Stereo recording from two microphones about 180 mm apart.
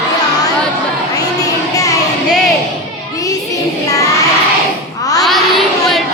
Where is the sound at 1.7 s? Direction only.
20° left (ahead or behind).